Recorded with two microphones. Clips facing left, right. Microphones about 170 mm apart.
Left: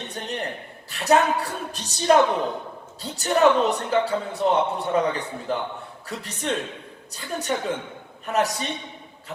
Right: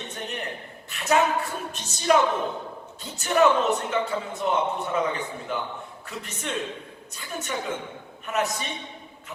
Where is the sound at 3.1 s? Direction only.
35° left (ahead or behind).